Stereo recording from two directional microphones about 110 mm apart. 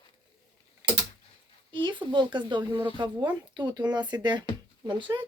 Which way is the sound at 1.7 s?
45° right (ahead or behind).